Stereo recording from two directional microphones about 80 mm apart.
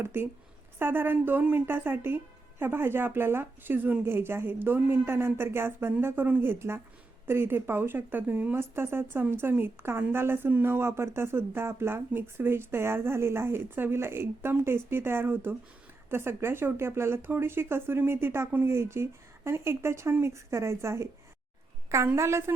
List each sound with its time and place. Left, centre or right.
0.0 s speech: right